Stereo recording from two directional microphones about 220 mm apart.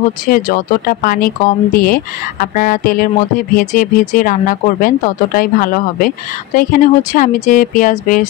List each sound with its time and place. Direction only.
0.3 s speech: 40° left (ahead or behind)